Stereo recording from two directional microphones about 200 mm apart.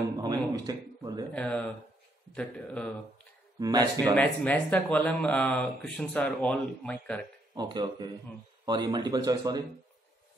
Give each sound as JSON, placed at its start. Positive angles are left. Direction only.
{"t": 0.2, "sound": "a sound", "side_deg": -20}
{"t": 1.3, "sound": "speech", "side_deg": 5}
{"t": 3.5, "sound": "speech", "side_deg": -20}
{"t": 4.1, "sound": "speech", "side_deg": 5}
{"t": 7.5, "sound": "speech", "side_deg": -20}